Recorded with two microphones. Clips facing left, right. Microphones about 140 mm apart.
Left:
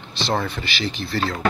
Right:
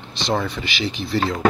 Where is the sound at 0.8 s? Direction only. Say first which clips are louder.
Right 3 dB; 10° right (ahead or behind).